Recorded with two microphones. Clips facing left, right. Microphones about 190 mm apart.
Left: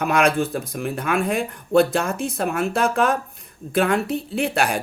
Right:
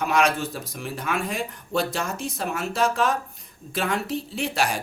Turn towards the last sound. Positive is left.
turn(degrees=60)  # may be behind; listen again after turning